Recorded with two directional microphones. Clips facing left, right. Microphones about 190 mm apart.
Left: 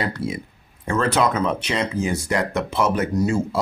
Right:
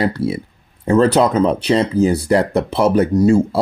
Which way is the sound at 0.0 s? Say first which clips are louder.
Right 7 dB; 35° right (ahead or behind).